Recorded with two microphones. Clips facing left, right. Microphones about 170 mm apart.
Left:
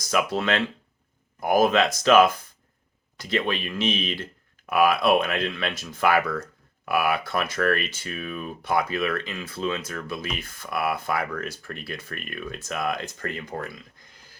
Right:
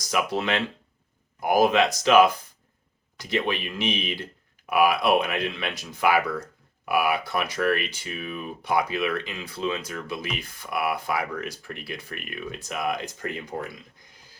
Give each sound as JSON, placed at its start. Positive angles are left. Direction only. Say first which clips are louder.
{"t": 0.1, "sound": "speech", "louder": "left 1 dB", "side_deg": -15}